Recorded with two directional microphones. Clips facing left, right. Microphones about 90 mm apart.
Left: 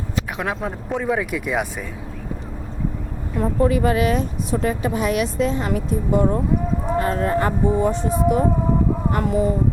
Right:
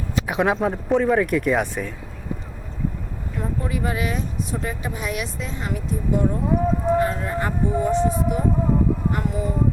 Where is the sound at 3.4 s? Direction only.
75° left (ahead or behind).